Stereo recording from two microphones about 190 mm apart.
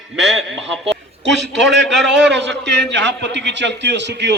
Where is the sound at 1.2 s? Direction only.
65° right (ahead or behind).